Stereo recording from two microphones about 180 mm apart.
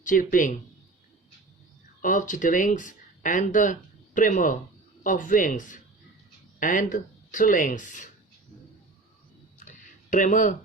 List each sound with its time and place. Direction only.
0.0 s speech: 45° left (ahead or behind)
2.0 s speech: 45° left (ahead or behind)
9.6 s a sound: 45° left (ahead or behind)